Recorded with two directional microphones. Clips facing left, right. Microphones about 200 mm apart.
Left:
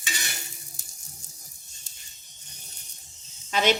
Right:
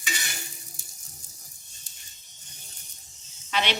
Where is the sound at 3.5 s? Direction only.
45° left (ahead or behind).